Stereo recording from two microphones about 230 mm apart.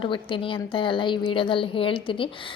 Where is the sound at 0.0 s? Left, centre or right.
Left.